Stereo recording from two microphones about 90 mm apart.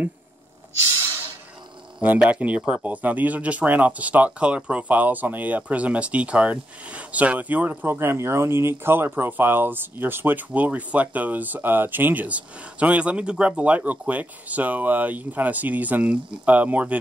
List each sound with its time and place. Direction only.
2.0 s speech: 15° right (ahead or behind)